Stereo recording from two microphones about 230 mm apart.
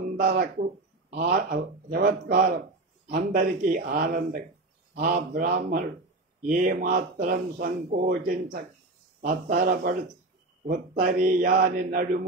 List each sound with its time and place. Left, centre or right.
0.0 s a sound: right
1.1 s speech: right
9.5 s speech: right